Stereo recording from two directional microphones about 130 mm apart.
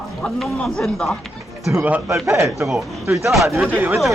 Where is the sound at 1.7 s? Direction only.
10° right (ahead or behind).